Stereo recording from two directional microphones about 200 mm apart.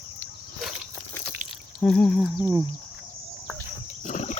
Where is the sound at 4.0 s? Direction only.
40° left (ahead or behind).